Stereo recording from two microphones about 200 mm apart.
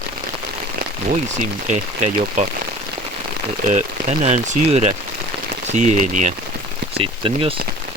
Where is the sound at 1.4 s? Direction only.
40° right (ahead or behind).